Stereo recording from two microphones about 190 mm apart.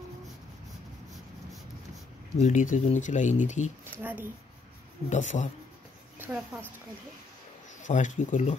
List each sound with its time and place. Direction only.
2.4 s speech: 40° left (ahead or behind)
4.0 s speech: 10° right (ahead or behind)
5.1 s speech: 40° left (ahead or behind)
6.1 s a sound: 10° right (ahead or behind)
7.8 s speech: 40° left (ahead or behind)